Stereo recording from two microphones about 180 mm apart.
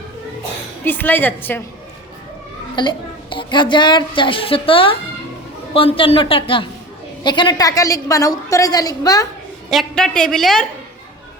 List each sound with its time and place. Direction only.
0.9 s a woman's voice: 10° left (ahead or behind)
2.7 s a woman's voice: 25° left (ahead or behind)
9.6 s a woman's voice: centre (ahead or behind)